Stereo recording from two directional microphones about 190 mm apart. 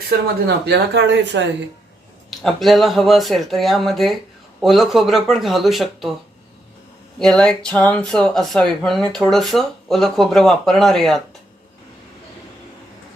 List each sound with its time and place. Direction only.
0.4 s speech: 60° right (ahead or behind)
2.4 s speech: centre (ahead or behind)
7.2 s speech: 5° left (ahead or behind)